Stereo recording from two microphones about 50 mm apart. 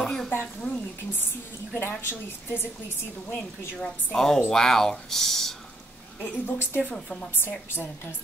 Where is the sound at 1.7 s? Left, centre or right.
Left.